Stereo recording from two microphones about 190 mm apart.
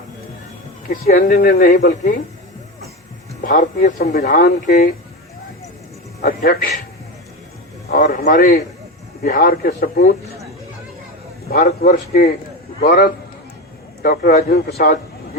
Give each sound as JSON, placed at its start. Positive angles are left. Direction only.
{"t": 1.0, "sound": "speech", "side_deg": 45}
{"t": 3.4, "sound": "speech", "side_deg": 45}
{"t": 6.2, "sound": "speech", "side_deg": 55}
{"t": 7.9, "sound": "speech", "side_deg": 45}
{"t": 11.4, "sound": "a man's voice", "side_deg": 55}